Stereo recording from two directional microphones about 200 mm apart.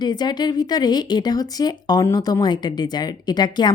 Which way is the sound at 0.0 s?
20° left (ahead or behind).